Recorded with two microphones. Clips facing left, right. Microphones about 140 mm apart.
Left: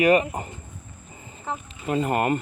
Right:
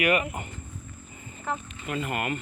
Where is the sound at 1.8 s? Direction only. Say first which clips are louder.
Left 8 dB; 35° left (ahead or behind).